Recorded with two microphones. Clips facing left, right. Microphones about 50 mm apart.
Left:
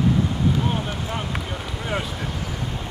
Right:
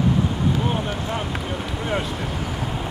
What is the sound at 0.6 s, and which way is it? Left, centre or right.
Vehicle, centre.